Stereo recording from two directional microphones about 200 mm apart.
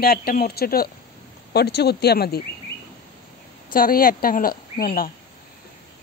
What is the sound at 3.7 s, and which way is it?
Speech, 45° left (ahead or behind).